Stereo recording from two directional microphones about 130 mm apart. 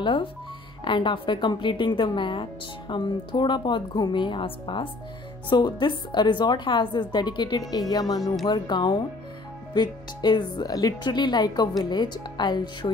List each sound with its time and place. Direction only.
0.0 s a woman's voice: 40° left (ahead or behind)